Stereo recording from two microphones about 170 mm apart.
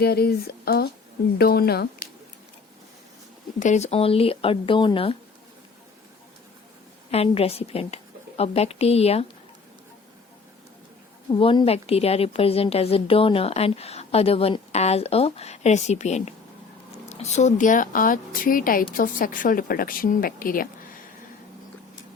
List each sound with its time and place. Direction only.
0.0 s speech: 70° left (ahead or behind)
3.6 s a woman's voice: 45° left (ahead or behind)
7.1 s a woman's voice: 35° left (ahead or behind)
11.3 s a woman's voice: 30° left (ahead or behind); by 20.7 s 55° left (ahead or behind)